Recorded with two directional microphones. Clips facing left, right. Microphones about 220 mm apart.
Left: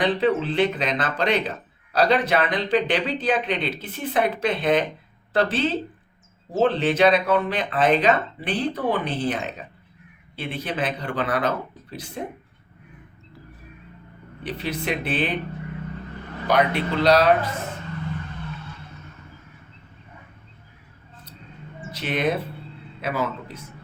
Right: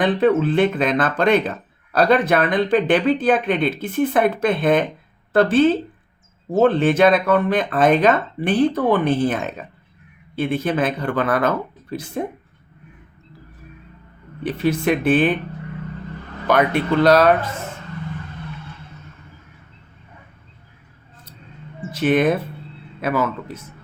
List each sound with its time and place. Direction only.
0.0 s speech: 50° right (ahead or behind)
14.4 s speech: 50° right (ahead or behind)
16.5 s speech: 50° right (ahead or behind)
21.9 s speech: 50° right (ahead or behind)